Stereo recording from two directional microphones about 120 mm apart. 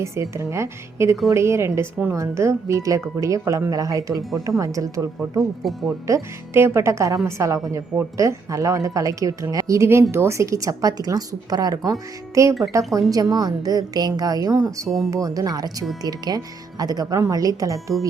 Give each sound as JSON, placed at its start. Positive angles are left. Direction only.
{"t": 0.0, "sound": "a woman's voice", "side_deg": -25}
{"t": 5.6, "sound": "speech", "side_deg": 0}
{"t": 6.1, "sound": "a woman's voice", "side_deg": -20}
{"t": 14.8, "sound": "speech", "side_deg": 0}
{"t": 15.1, "sound": "a woman's voice", "side_deg": -30}